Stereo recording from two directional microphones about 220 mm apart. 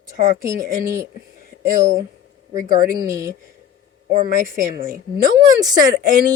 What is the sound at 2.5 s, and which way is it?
Speech, 35° right (ahead or behind).